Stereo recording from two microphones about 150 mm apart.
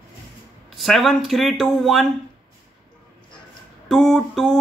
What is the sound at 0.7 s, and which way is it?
Speech, centre (ahead or behind).